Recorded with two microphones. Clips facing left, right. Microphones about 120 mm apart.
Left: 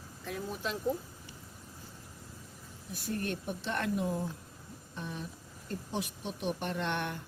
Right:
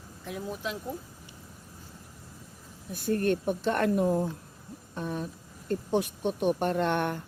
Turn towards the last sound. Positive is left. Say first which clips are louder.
# right 8 dB
turn(degrees=-45)  # may be behind; listen again after turning